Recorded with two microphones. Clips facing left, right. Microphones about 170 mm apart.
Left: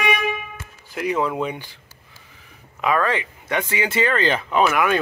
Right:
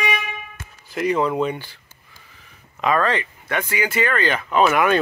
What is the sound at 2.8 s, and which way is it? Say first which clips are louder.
Speech: right 1 dB; 10° left (ahead or behind).